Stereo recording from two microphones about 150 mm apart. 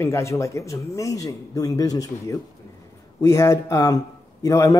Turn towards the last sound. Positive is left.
turn(degrees=20)  # may be behind; listen again after turning